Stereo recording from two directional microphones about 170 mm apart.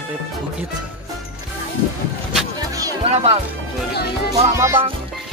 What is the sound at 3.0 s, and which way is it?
Speech, 35° right (ahead or behind).